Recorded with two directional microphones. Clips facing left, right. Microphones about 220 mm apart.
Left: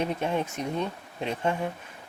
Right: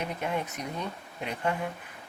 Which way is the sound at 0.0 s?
30° left (ahead or behind).